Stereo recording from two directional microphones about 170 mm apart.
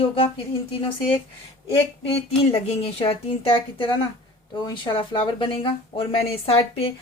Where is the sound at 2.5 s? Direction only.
35° left (ahead or behind).